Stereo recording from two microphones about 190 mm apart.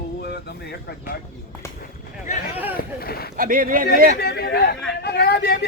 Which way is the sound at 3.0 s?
55° left (ahead or behind).